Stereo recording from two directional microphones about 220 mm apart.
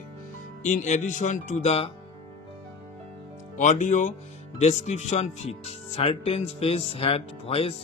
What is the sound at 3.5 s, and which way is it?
Speech, 35° left (ahead or behind).